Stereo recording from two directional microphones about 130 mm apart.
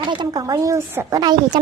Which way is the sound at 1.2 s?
30° right (ahead or behind).